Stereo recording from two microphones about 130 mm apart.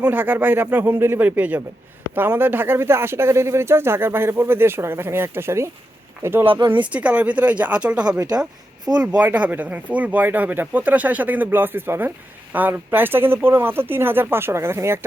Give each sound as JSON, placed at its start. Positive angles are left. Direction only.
{"t": 0.0, "sound": "speech", "side_deg": -15}